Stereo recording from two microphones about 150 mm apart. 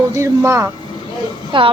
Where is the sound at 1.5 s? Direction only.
35° right (ahead or behind).